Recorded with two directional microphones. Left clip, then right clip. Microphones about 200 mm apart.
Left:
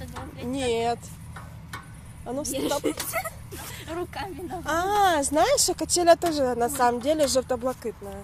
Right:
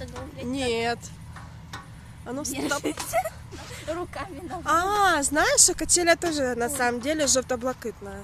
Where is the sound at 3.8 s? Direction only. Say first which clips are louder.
Right 1 dB; 15° right (ahead or behind).